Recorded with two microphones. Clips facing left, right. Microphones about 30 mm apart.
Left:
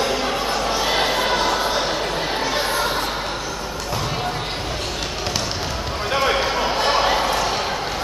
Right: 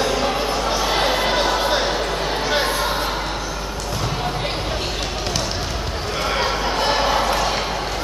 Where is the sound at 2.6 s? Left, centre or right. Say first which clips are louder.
Even; centre.